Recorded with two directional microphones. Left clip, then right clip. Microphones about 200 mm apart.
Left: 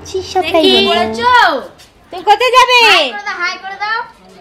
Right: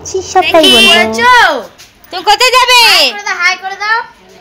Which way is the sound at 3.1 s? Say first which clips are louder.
Right 6 dB; 40° right (ahead or behind).